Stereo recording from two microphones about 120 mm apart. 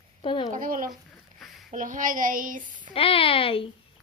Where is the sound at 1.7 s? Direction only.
90° right.